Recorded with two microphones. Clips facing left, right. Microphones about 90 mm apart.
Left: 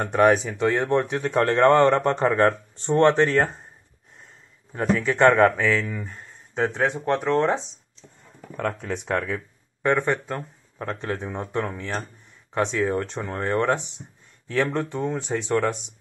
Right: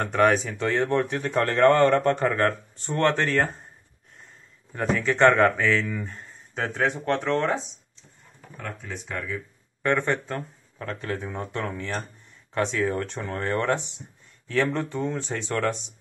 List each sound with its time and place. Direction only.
0.0 s speech: 15° left (ahead or behind)
4.7 s speech: 10° left (ahead or behind)
6.5 s speech: 20° left (ahead or behind)
8.5 s speech: 90° left; by 9.4 s 65° left (ahead or behind)
9.8 s speech: 10° left (ahead or behind)